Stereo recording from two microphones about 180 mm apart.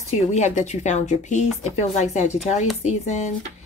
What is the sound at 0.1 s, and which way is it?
Speech, 40° left (ahead or behind).